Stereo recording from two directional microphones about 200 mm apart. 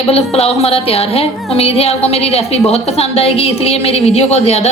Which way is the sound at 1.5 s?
30° left (ahead or behind).